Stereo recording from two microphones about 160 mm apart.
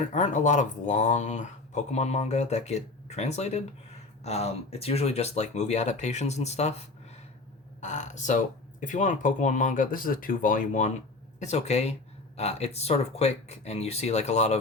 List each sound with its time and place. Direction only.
0.1 s speech: 50° left (ahead or behind)
7.8 s speech: 50° left (ahead or behind)